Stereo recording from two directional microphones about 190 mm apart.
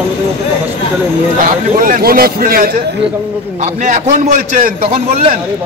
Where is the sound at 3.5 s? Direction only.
40° right (ahead or behind).